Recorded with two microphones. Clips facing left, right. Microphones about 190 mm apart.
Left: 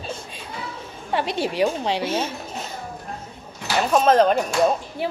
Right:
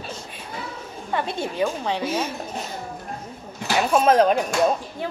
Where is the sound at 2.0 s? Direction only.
30° left (ahead or behind).